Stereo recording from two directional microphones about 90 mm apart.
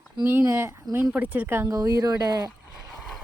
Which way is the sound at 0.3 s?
30° right (ahead or behind).